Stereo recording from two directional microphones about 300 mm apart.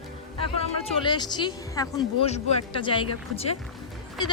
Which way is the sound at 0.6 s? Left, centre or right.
Centre.